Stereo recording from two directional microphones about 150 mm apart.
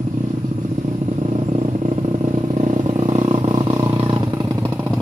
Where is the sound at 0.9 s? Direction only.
45° right (ahead or behind); by 4.9 s 15° right (ahead or behind).